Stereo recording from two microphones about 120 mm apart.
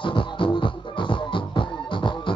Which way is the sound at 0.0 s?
45° left (ahead or behind).